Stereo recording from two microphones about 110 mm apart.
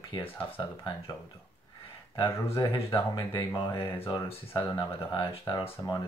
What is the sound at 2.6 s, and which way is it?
Speech, 55° left (ahead or behind).